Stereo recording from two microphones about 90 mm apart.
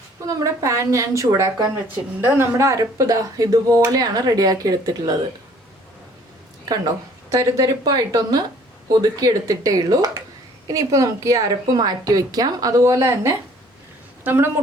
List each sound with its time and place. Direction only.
0.3 s a woman's voice: 40° right (ahead or behind)
6.7 s a woman's voice: 40° right (ahead or behind); by 14.6 s 25° right (ahead or behind)